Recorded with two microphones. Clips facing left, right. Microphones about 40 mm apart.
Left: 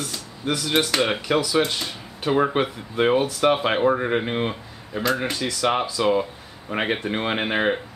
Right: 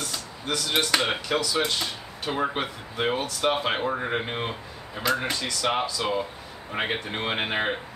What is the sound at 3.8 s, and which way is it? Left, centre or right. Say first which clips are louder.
Speech: left 7 dB; centre.